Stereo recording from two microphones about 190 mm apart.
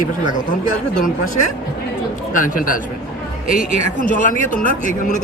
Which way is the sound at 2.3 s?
45° left (ahead or behind).